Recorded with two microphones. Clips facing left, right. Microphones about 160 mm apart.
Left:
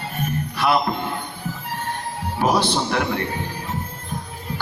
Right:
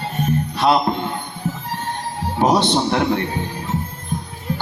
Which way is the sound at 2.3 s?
25° right (ahead or behind).